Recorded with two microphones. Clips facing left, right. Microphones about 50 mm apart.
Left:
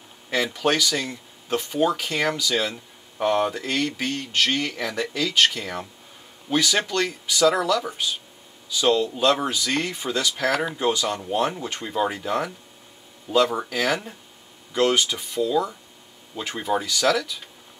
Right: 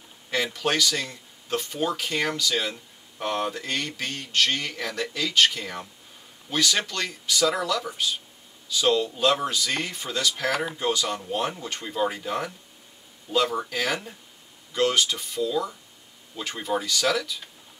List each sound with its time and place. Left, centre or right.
0.5 s speech: centre
17.1 s speech: centre